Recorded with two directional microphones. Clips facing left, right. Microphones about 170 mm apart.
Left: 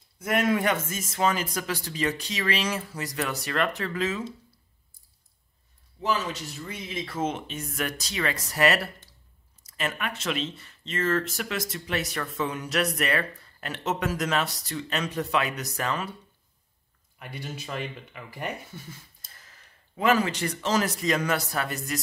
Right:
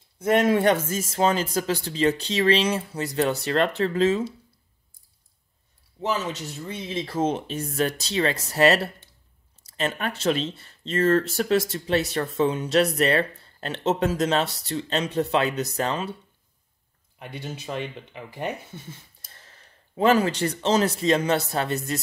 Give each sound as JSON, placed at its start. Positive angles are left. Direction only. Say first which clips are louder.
{"t": 0.2, "sound": "speech", "louder": "right 5 dB", "side_deg": -30}
{"t": 5.9, "sound": "speech", "louder": "right 1 dB", "side_deg": -25}
{"t": 17.2, "sound": "speech", "louder": "right 2 dB", "side_deg": -20}